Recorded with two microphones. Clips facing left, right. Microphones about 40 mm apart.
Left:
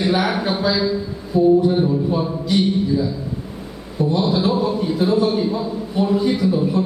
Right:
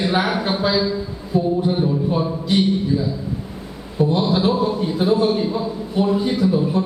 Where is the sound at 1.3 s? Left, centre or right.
Right.